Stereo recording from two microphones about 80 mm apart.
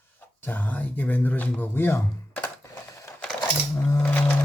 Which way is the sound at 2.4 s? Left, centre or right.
Left.